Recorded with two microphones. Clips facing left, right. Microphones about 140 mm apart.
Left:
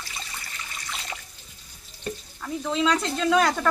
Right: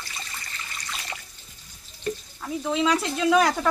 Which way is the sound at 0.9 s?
20° left (ahead or behind).